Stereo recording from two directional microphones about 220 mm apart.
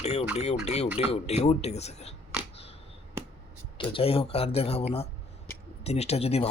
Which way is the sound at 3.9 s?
25° left (ahead or behind).